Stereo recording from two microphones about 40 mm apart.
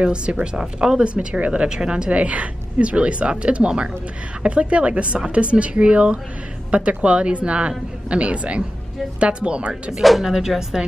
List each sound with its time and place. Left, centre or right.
0.0 s speech: right
1.0 s a woman's voice: right
1.5 s a woman's voice: right
10.0 s speech: centre